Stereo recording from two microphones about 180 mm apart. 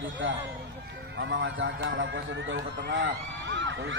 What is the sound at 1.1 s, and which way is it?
A man's voice, 75° right (ahead or behind).